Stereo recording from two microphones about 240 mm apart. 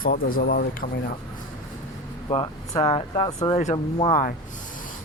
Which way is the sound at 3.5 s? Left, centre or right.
Left.